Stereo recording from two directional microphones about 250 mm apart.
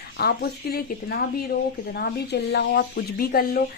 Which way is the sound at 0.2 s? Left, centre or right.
Left.